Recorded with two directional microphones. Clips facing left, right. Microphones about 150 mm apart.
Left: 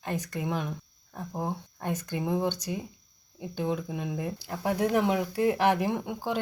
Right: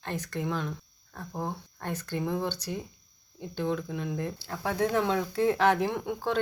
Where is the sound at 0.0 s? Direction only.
10° left (ahead or behind).